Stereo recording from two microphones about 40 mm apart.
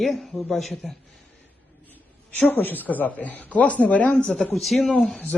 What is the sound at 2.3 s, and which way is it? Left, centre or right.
Speech, left.